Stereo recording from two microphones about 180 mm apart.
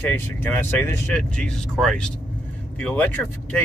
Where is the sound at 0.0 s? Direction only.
10° left (ahead or behind).